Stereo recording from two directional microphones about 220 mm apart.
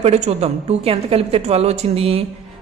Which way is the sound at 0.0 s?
30° right (ahead or behind).